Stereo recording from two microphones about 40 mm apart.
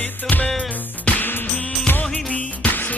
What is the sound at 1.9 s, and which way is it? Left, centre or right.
Music of bollywood, left.